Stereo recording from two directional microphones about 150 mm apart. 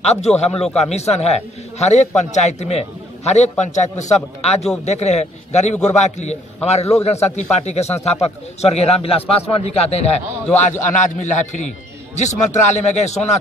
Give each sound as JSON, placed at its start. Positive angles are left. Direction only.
{"t": 0.0, "sound": "speech", "side_deg": 45}